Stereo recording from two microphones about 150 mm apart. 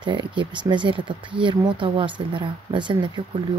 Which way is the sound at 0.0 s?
30° right (ahead or behind).